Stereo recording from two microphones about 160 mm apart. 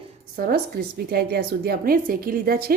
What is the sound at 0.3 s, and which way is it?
A woman's voice, 70° right (ahead or behind).